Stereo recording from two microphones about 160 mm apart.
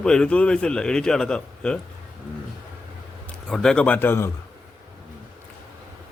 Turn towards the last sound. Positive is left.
turn(degrees=15)  # may be behind; listen again after turning